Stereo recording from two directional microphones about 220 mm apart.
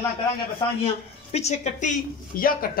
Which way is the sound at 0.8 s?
30° left (ahead or behind).